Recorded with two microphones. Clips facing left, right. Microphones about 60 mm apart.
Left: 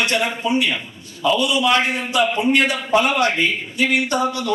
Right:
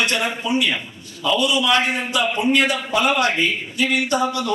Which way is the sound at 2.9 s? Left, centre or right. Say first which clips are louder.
Left 2 dB; left.